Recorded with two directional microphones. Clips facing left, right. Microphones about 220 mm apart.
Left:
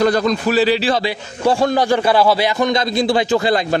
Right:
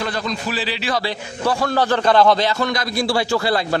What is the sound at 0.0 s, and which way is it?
Speech, 45° left (ahead or behind).